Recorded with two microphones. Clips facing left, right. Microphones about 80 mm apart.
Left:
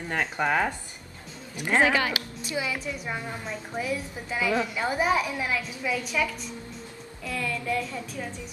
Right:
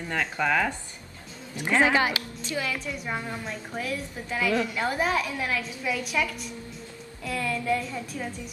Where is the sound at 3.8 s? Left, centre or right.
Centre.